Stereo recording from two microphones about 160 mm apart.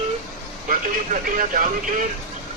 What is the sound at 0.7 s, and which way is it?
Speech, 55° right (ahead or behind).